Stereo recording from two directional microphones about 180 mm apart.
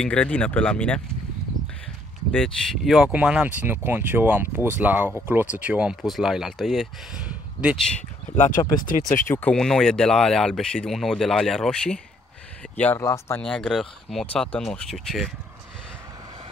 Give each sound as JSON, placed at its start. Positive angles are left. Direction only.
{"t": 0.0, "sound": "speech", "side_deg": 5}
{"t": 2.3, "sound": "speech", "side_deg": 0}
{"t": 8.4, "sound": "speech", "side_deg": 45}
{"t": 9.3, "sound": "speech", "side_deg": 5}
{"t": 13.4, "sound": "speech", "side_deg": 5}